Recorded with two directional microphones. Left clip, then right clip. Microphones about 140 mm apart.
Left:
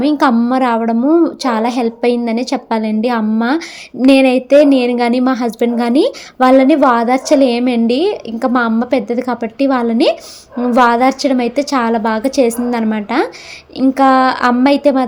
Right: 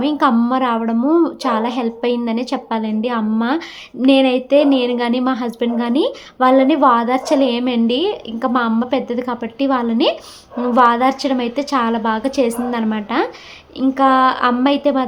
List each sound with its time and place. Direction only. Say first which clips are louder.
0.0 s a woman's voice: left 3 dB; 30° left (ahead or behind)